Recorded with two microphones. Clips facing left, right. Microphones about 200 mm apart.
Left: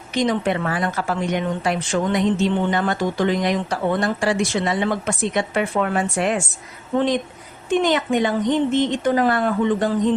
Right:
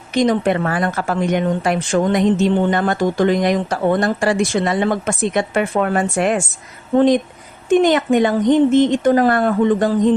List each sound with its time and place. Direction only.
0.1 s speech: 50° right (ahead or behind)